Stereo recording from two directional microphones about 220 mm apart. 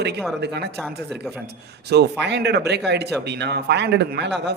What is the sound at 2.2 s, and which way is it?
Speech, 50° right (ahead or behind).